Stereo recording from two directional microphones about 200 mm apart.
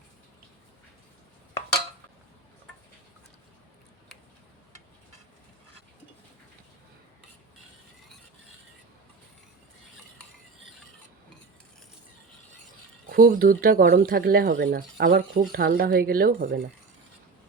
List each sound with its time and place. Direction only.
13.1 s speech: 45° right (ahead or behind)